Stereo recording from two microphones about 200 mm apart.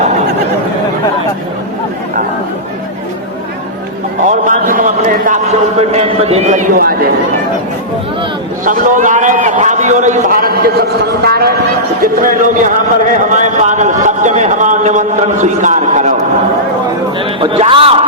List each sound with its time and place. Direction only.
4.3 s a man's voice: 40° right (ahead or behind)
5.9 s speech: 30° right (ahead or behind); by 7.1 s 45° right (ahead or behind)
8.6 s speech: 40° right (ahead or behind)
17.2 s speech: 25° right (ahead or behind)